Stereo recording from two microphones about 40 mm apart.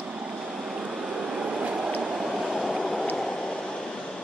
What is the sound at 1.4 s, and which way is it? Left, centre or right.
Train, right.